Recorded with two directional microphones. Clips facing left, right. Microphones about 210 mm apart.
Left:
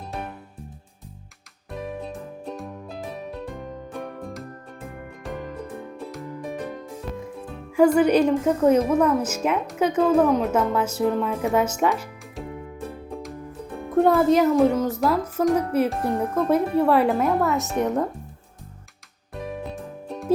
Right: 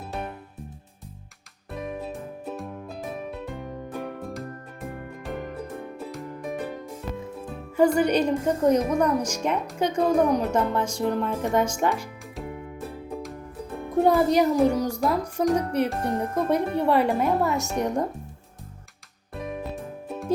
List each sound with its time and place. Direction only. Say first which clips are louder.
2.0 s music: even; 5° right (ahead or behind)
6.0 s music: even; centre (ahead or behind)
7.9 s speech: left 4 dB; 5° left (ahead or behind)
14.0 s speech: left 2 dB; centre (ahead or behind)
20.1 s music: left 3 dB; centre (ahead or behind)